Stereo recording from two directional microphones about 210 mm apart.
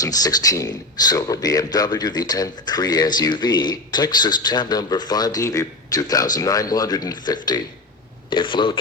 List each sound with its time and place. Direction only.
0.0 s speech: 15° left (ahead or behind)